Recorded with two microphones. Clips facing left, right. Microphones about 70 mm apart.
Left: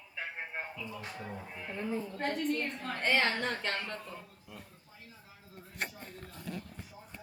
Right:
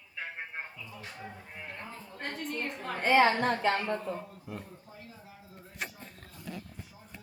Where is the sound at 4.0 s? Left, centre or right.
Right.